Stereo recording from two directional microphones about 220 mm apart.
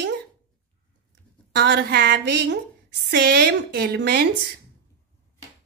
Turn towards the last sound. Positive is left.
turn(degrees=-50)  # may be behind; listen again after turning